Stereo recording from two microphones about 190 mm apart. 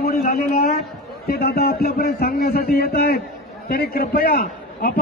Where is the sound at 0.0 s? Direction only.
50° left (ahead or behind).